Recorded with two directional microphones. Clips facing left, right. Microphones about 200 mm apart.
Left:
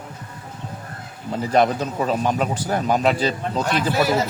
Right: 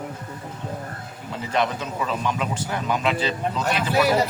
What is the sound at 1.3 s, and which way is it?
Speech, 40° left (ahead or behind).